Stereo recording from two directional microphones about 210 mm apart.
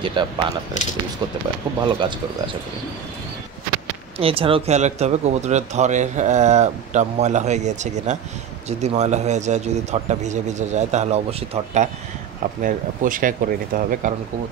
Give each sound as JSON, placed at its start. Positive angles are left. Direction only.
{"t": 0.0, "sound": "speech", "side_deg": -20}
{"t": 2.0, "sound": "speech", "side_deg": -25}
{"t": 4.2, "sound": "speech", "side_deg": -25}